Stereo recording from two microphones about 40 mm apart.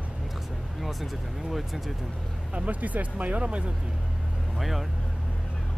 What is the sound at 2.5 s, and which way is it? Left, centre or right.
Speech, right.